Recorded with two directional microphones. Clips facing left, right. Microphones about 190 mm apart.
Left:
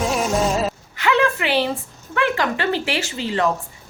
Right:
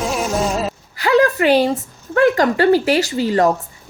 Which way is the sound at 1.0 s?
35° right (ahead or behind).